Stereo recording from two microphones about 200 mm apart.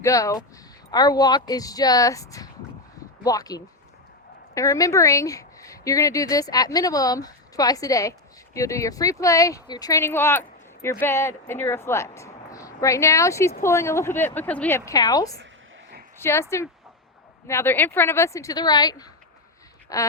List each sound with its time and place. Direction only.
0.0 s a woman's voice: 15° left (ahead or behind)
14.8 s a woman's voice: 20° left (ahead or behind)